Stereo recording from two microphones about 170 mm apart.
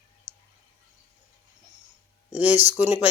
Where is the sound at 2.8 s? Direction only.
15° right (ahead or behind).